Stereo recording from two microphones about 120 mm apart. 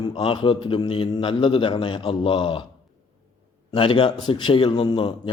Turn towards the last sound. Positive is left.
turn(degrees=45)  # may be behind; listen again after turning